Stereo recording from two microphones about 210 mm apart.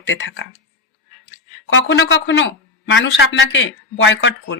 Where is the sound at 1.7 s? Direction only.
60° left (ahead or behind).